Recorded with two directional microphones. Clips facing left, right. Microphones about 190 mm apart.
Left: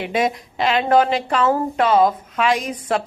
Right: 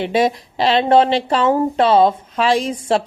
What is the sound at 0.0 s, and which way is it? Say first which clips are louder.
Speech: right 4 dB; 30° right (ahead or behind).